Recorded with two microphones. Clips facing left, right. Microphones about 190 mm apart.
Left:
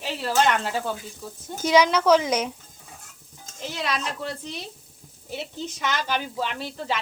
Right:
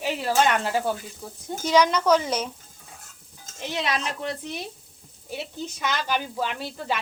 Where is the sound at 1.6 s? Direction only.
10° left (ahead or behind).